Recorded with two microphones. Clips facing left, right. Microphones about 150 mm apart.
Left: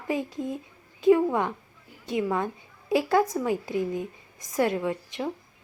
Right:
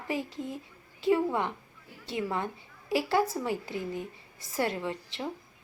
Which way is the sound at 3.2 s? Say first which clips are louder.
Left 4 dB; 20° left (ahead or behind).